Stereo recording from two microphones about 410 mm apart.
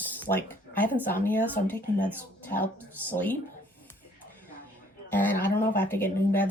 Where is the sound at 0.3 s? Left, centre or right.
Centre.